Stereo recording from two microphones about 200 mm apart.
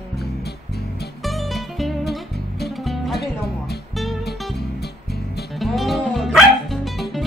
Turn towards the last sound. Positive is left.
turn(degrees=0)  # may be behind; listen again after turning